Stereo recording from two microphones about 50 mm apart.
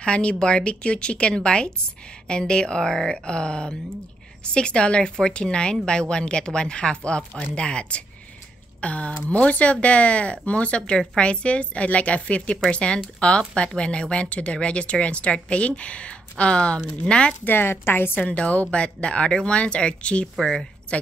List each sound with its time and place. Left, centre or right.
0.0 s a woman's voice: left
17.5 s a woman's voice: left
18.2 s a woman's voice: left
20.3 s speech: centre
20.9 s speech: left